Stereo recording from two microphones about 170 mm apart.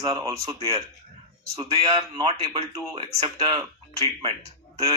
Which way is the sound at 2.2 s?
35° right (ahead or behind).